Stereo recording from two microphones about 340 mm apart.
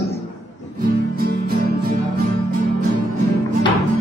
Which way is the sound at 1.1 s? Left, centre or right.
Right.